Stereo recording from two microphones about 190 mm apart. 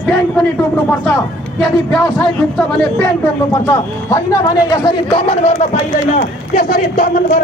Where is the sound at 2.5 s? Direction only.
5° left (ahead or behind).